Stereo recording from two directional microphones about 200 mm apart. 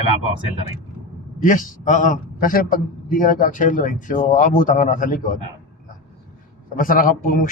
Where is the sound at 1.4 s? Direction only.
40° left (ahead or behind).